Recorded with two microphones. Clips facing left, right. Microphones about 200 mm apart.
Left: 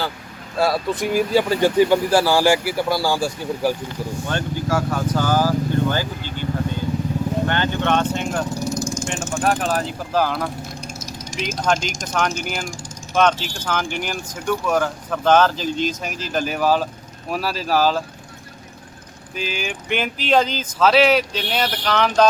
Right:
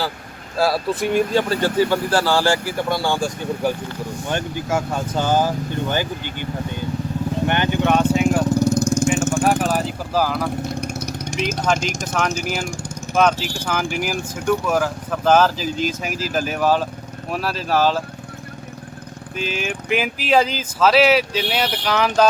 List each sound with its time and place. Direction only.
0.5 s speech: centre (ahead or behind)
4.3 s speech: 20° right (ahead or behind)
8.5 s vehicle: 60° right (ahead or behind)
9.4 s speech: 10° right (ahead or behind)
10.8 s vehicle: 65° right (ahead or behind)
11.3 s speech: centre (ahead or behind)
19.3 s speech: centre (ahead or behind)